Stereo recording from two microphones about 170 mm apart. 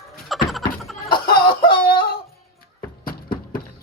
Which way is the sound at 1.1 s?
60° left (ahead or behind).